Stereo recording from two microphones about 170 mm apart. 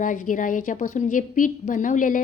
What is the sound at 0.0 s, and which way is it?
A woman's voice, 50° left (ahead or behind).